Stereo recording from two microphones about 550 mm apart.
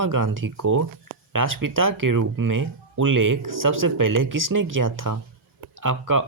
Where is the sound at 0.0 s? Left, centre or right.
Right.